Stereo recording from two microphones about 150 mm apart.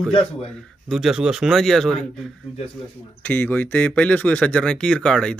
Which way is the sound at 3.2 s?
10° left (ahead or behind).